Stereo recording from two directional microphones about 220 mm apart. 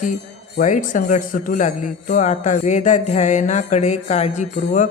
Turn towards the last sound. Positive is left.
turn(degrees=35)  # may be behind; listen again after turning